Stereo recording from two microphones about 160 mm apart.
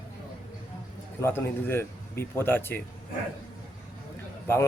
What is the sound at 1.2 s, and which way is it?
Speech, 15° left (ahead or behind).